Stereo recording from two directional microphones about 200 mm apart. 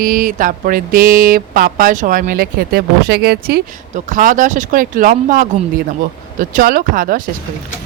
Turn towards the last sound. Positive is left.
turn(degrees=-45)  # may be behind; listen again after turning